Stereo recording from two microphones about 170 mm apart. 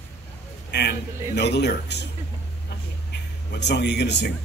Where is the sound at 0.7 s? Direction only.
75° left (ahead or behind).